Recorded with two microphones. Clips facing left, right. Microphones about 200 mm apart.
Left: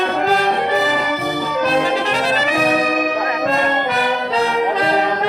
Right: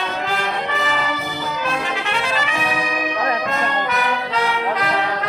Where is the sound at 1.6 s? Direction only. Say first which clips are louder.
Left 9 dB; 35° left (ahead or behind).